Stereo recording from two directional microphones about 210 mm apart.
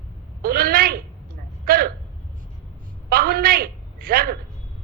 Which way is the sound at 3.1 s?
45° right (ahead or behind).